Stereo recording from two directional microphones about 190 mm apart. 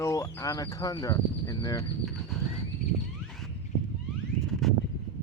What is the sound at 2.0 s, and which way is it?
Horse, centre (ahead or behind).